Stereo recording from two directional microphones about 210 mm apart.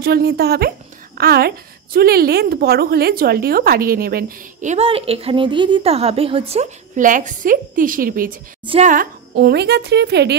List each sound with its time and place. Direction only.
0.0 s a woman's voice: 50° right (ahead or behind)